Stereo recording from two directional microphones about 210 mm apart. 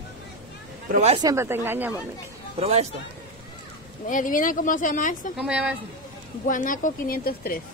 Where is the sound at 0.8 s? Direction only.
30° right (ahead or behind).